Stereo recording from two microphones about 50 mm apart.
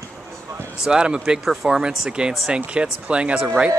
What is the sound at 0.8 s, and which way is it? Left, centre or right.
Speech, centre.